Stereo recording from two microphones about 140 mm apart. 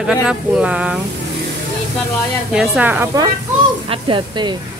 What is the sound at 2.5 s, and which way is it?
Speech, 5° right (ahead or behind).